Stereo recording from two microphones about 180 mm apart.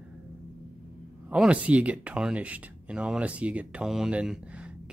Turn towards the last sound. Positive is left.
turn(degrees=-5)  # may be behind; listen again after turning